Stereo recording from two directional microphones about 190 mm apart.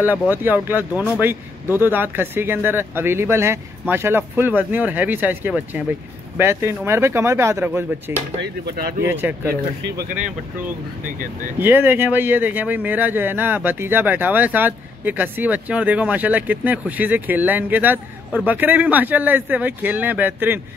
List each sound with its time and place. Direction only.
0.0 s speech: 10° right (ahead or behind)
9.5 s speech: 50° right (ahead or behind)
11.6 s speech: 10° right (ahead or behind)